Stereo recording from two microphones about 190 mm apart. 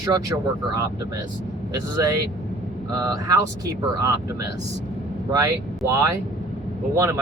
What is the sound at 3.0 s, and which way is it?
Speech, 15° right (ahead or behind).